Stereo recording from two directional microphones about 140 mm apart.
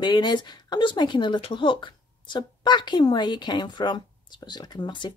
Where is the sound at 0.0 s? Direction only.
30° left (ahead or behind).